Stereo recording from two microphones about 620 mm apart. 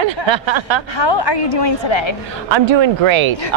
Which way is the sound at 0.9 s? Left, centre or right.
Left.